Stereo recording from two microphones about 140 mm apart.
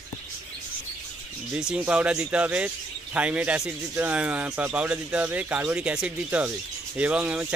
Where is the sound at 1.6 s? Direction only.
5° right (ahead or behind).